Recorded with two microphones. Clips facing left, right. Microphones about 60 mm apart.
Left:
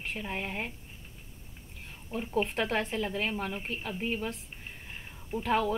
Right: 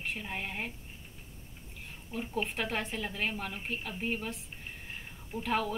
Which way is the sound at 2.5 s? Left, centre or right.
Left.